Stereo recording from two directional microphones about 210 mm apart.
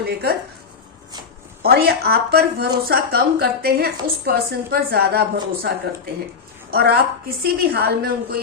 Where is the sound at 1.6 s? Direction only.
50° right (ahead or behind).